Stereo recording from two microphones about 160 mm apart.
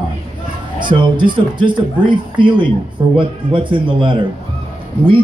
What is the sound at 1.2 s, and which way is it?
A man's voice, 30° right (ahead or behind).